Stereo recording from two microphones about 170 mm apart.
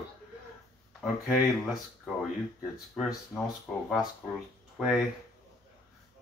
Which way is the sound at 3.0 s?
5° left (ahead or behind).